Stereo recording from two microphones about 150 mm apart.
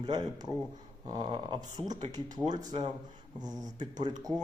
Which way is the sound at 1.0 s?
30° right (ahead or behind).